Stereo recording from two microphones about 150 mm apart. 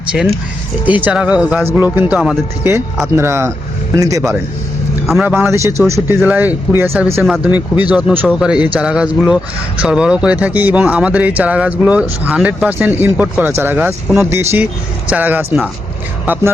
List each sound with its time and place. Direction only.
0.1 s speech: 5° right (ahead or behind); by 4.2 s 25° right (ahead or behind)
5.0 s speech: centre (ahead or behind)
5.3 s speech: 15° right (ahead or behind)
7.2 s speech: centre (ahead or behind)
7.5 s speech: 10° right (ahead or behind)